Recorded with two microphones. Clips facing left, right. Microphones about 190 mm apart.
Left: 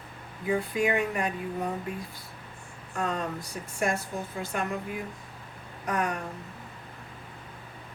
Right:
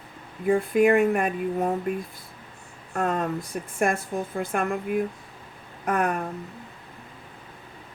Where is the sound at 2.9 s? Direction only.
55° right (ahead or behind).